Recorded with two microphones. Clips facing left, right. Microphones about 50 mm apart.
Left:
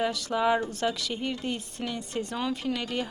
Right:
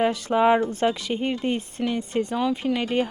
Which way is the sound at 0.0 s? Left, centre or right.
Right.